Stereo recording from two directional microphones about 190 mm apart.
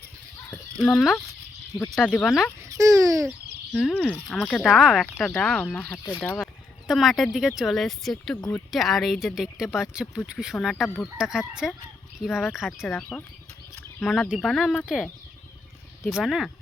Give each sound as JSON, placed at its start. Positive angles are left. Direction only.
{"t": 0.8, "sound": "speech", "side_deg": 0}
{"t": 1.7, "sound": "speech", "side_deg": 20}
{"t": 2.0, "sound": "speech", "side_deg": 5}
{"t": 2.6, "sound": "a sound", "side_deg": -15}
{"t": 3.2, "sound": "speech", "side_deg": 0}
{"t": 8.4, "sound": "speech", "side_deg": 10}
{"t": 8.7, "sound": "speech", "side_deg": 0}
{"t": 10.8, "sound": "speech", "side_deg": 10}
{"t": 11.2, "sound": "speech", "side_deg": -5}
{"t": 13.0, "sound": "speech", "side_deg": 10}
{"t": 14.3, "sound": "speech", "side_deg": 0}